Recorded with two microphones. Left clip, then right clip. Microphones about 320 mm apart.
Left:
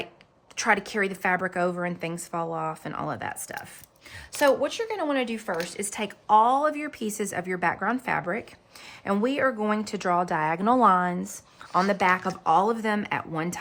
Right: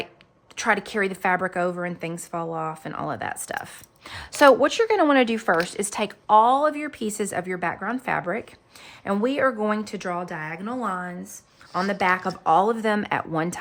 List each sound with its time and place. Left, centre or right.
0.5 s a woman's voice: centre
4.1 s a woman's voice: centre
11.7 s a woman's voice: centre